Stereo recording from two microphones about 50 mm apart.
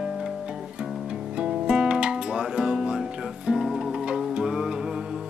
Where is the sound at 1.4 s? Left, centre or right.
Centre.